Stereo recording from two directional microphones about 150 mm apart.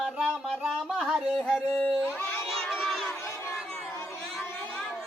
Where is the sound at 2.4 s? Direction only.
Centre (ahead or behind).